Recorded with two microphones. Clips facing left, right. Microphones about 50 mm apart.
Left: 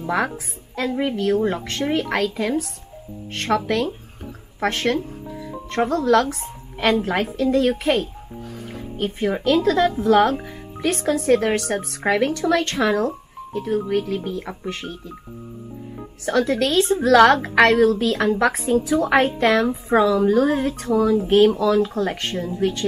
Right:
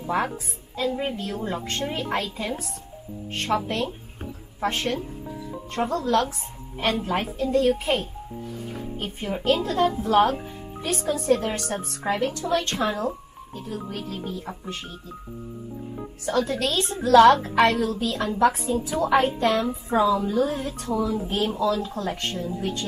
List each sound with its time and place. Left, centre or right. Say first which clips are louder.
0.7 s a woman's voice: left 4 dB; left
16.3 s a woman's voice: left 5 dB; left
21.3 s a woman's voice: left 14 dB; left
21.6 s speech: left 6 dB; left
22.6 s a woman's voice: left 7 dB; left